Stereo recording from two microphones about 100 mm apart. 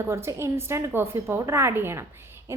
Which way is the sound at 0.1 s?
25° right (ahead or behind).